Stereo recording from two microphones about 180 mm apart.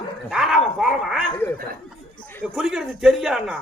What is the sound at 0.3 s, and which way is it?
Dog, 5° right (ahead or behind).